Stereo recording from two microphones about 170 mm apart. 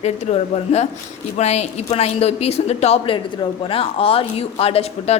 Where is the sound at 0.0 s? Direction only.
40° left (ahead or behind).